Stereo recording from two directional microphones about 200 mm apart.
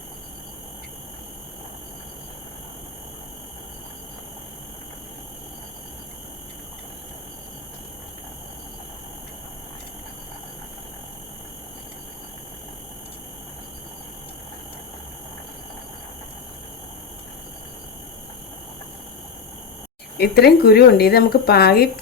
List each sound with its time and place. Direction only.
20.1 s speech: 50° left (ahead or behind)